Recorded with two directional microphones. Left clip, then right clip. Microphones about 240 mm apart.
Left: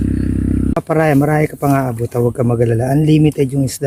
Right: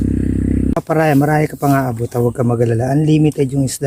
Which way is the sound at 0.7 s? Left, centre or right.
Centre.